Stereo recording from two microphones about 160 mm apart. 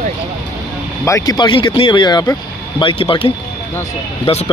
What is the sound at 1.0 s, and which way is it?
Speech, 20° left (ahead or behind).